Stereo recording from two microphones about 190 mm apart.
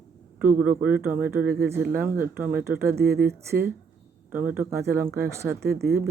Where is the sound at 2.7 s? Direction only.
55° right (ahead or behind).